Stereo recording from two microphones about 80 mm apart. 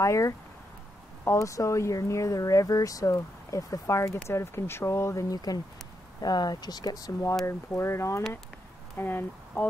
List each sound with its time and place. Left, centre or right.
0.0 s speech: left
5.3 s speech: left
7.4 s speech: left
8.9 s speech: left